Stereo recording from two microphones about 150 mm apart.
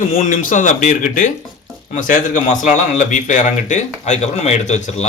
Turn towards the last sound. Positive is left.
turn(degrees=50)  # may be behind; listen again after turning